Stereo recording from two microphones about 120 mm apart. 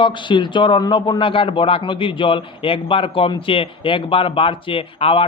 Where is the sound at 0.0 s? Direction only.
40° left (ahead or behind).